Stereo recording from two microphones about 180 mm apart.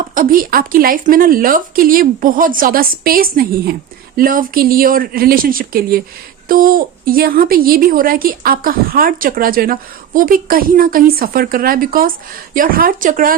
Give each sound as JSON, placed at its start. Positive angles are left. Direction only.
{"t": 0.1, "sound": "speech", "side_deg": -50}